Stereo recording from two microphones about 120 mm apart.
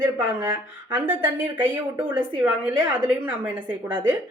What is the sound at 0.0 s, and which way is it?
Speech, 20° right (ahead or behind).